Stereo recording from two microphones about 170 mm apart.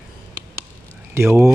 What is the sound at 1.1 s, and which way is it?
Speech, 15° right (ahead or behind).